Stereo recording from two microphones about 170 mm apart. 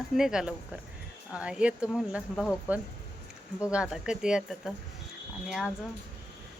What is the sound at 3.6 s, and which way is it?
Speech, 5° right (ahead or behind).